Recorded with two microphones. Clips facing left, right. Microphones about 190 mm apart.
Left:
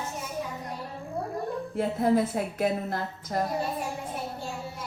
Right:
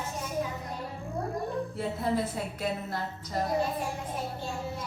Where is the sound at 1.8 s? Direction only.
50° left (ahead or behind).